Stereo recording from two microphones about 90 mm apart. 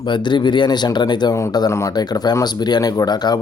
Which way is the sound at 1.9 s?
50° left (ahead or behind).